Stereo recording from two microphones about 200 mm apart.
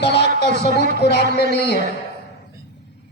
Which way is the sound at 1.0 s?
55° left (ahead or behind).